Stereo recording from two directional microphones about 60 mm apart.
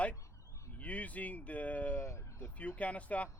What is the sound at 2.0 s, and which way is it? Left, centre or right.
Speech, left.